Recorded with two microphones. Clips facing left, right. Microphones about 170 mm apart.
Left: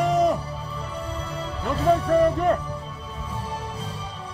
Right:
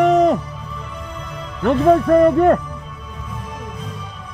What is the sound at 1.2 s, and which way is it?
Music, 35° left (ahead or behind).